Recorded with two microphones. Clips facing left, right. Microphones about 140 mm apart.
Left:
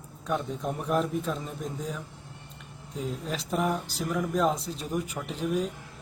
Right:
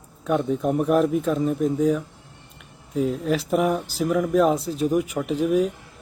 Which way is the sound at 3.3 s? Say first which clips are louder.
Right 6 dB; 5° right (ahead or behind).